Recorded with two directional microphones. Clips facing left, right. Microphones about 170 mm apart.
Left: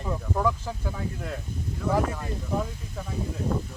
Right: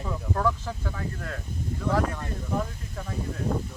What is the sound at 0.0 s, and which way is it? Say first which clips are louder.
Speech: left 1 dB; 10° left (ahead or behind).